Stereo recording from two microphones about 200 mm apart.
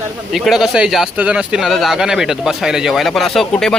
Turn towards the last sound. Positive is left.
turn(degrees=0)  # may be behind; listen again after turning